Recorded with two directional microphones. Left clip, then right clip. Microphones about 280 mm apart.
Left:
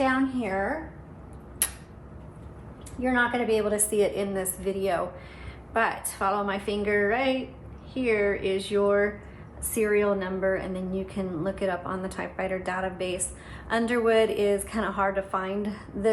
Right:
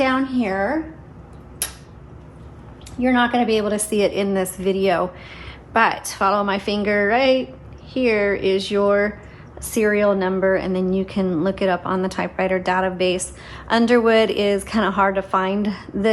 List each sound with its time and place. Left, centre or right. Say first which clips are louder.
0.0 s a woman's voice: right 6 dB; right
3.0 s a woman's voice: right 7 dB; right